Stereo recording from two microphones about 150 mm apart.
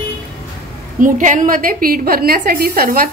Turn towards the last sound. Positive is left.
turn(degrees=-75)  # may be behind; listen again after turning